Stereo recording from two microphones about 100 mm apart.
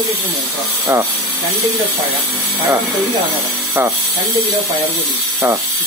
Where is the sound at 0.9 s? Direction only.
15° right (ahead or behind).